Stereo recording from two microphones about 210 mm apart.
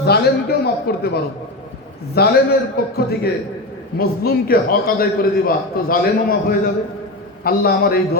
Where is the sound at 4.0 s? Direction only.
45° left (ahead or behind).